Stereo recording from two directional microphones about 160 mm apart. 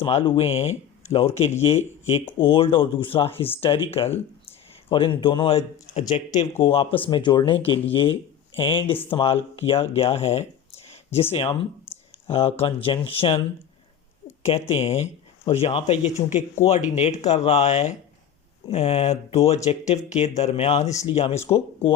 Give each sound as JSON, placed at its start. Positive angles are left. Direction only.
{"t": 0.0, "sound": "speech", "side_deg": 35}
{"t": 14.7, "sound": "speech", "side_deg": 40}